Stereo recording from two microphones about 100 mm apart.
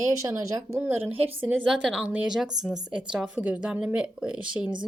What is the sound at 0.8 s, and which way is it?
Speech, 20° right (ahead or behind).